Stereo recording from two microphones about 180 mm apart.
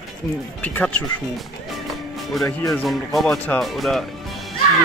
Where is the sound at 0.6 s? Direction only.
10° left (ahead or behind).